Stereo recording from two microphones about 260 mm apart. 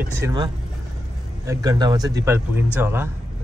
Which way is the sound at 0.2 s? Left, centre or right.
Centre.